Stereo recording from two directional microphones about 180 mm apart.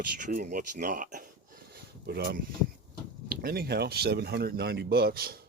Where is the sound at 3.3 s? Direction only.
55° right (ahead or behind).